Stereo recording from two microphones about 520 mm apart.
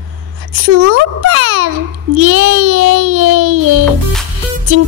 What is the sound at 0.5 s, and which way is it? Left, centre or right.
A child's voice, right.